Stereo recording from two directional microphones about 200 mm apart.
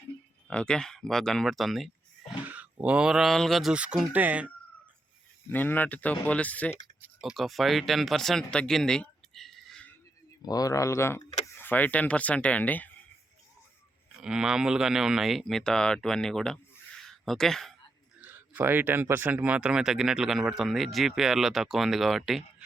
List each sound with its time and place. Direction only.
0.4 s speech: 5° left (ahead or behind)
5.5 s speech: 10° left (ahead or behind)
10.4 s speech: 20° left (ahead or behind)
14.1 s speech: 5° right (ahead or behind)
18.2 s speech: 10° right (ahead or behind)